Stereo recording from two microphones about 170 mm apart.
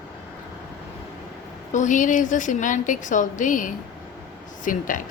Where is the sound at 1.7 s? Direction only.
45° left (ahead or behind).